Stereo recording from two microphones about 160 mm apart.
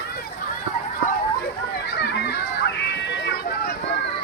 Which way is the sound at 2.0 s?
90° left.